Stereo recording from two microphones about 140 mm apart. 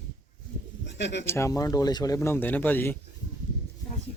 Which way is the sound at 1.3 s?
20° left (ahead or behind).